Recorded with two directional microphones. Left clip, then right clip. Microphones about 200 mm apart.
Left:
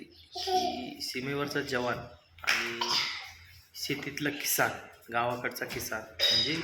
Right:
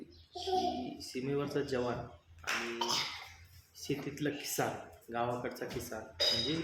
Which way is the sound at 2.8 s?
60° right (ahead or behind).